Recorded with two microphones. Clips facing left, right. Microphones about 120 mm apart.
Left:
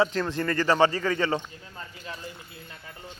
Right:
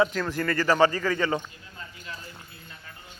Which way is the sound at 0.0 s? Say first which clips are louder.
Even; 25° left (ahead or behind).